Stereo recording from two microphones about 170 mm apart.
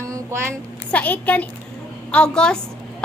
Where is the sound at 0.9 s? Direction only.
10° left (ahead or behind).